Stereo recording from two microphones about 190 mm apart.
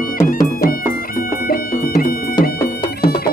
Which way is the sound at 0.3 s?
50° left (ahead or behind).